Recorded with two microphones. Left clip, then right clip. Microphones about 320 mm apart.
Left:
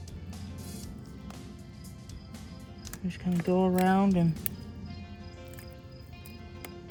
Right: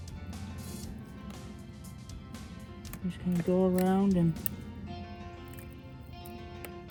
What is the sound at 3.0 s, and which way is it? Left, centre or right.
Speech, left.